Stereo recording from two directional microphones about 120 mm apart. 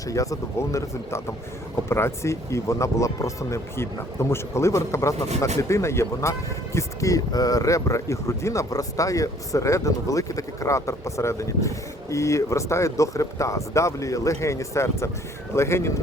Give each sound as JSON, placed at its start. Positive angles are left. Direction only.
{"t": 0.1, "sound": "speech", "side_deg": 30}